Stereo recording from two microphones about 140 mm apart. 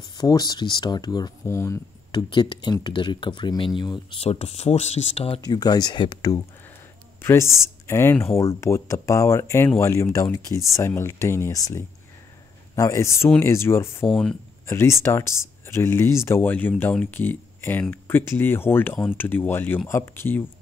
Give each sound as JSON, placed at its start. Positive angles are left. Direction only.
{"t": 0.2, "sound": "speech", "side_deg": 30}
{"t": 1.4, "sound": "speech", "side_deg": 20}
{"t": 2.1, "sound": "speech", "side_deg": 35}
{"t": 5.5, "sound": "speech", "side_deg": 30}
{"t": 7.2, "sound": "speech", "side_deg": 20}